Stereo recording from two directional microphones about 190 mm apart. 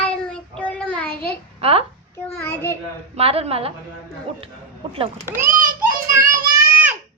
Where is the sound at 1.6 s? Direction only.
30° right (ahead or behind).